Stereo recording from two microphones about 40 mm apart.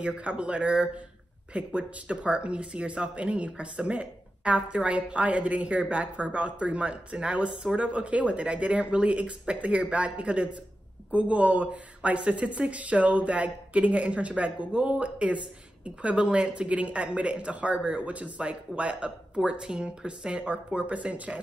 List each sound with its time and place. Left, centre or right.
0.0 s speech: right